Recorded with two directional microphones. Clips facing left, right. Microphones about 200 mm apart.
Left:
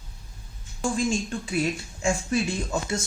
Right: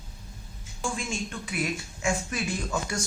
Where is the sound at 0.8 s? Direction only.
35° left (ahead or behind).